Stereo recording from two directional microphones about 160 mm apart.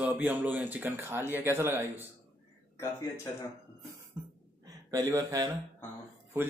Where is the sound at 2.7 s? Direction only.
20° left (ahead or behind).